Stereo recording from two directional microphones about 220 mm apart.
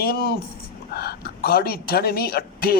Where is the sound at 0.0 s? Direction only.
45° left (ahead or behind).